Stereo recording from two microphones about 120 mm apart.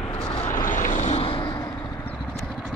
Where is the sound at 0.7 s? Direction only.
90° left.